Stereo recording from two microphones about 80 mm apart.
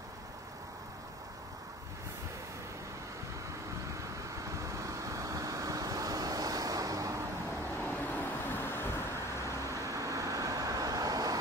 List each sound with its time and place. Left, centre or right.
4.5 s vehicle: right
7.8 s vehicle: left
9.4 s vehicle: right